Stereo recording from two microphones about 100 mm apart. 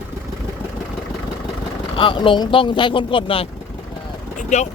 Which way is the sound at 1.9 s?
55° left (ahead or behind).